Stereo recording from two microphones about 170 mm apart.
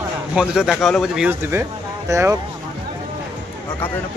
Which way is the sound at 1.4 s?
15° right (ahead or behind).